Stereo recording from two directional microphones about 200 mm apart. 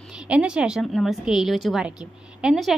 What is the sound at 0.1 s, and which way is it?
A woman's voice, 5° right (ahead or behind).